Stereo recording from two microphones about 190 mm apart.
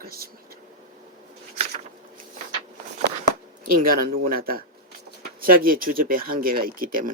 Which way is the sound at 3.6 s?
50° right (ahead or behind).